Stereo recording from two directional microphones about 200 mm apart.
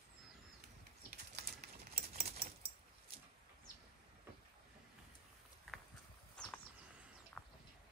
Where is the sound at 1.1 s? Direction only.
55° right (ahead or behind).